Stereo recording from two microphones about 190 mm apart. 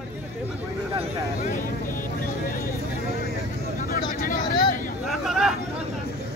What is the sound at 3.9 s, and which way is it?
Vehicle, 50° left (ahead or behind).